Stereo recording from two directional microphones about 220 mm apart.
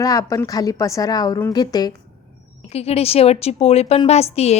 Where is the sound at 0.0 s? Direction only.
15° left (ahead or behind).